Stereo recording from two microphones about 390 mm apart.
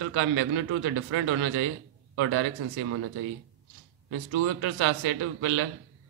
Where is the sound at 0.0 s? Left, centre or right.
Right.